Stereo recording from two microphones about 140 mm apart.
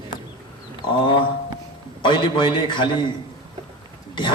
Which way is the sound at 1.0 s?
35° left (ahead or behind).